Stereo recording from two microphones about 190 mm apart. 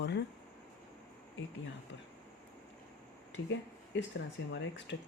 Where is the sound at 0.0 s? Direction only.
65° left (ahead or behind).